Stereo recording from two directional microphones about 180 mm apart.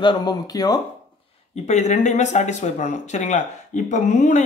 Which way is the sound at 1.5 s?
40° left (ahead or behind).